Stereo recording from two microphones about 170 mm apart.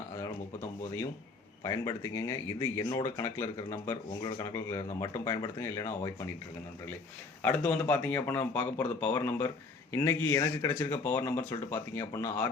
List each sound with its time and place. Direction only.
1.6 s speech: 20° left (ahead or behind)
4.2 s speech: 25° left (ahead or behind)
7.4 s speech: 10° left (ahead or behind)